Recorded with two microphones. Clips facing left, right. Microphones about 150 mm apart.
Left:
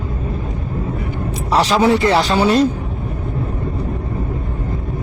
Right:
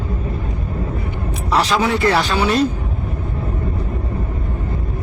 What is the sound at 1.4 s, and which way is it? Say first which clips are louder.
Speech: left 3 dB; 30° left (ahead or behind).